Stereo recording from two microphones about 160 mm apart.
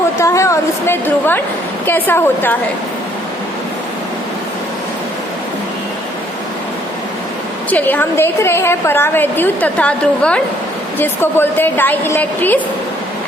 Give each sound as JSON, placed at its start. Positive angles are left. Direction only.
{"t": 0.2, "sound": "a sound", "side_deg": 20}
{"t": 1.9, "sound": "a woman's voice", "side_deg": 15}
{"t": 7.7, "sound": "a woman's voice", "side_deg": 10}